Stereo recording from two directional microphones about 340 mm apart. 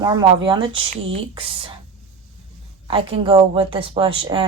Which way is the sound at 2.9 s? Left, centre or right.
Centre.